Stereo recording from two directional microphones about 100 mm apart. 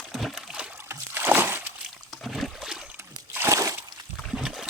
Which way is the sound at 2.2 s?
Centre (ahead or behind).